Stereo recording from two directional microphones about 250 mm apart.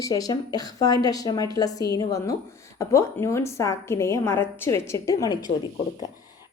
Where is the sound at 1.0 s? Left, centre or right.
Centre.